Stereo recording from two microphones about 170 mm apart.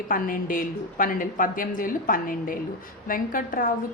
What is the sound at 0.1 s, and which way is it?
A woman's voice, 55° left (ahead or behind).